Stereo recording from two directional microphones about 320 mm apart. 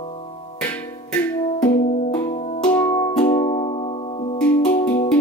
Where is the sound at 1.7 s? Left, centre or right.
Left.